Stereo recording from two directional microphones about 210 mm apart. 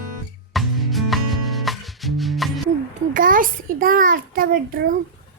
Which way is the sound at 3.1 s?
40° right (ahead or behind).